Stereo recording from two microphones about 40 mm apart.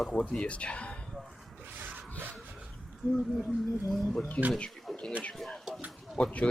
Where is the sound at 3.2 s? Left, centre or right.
Centre.